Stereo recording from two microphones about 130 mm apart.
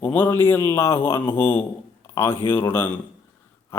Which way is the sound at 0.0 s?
15° left (ahead or behind).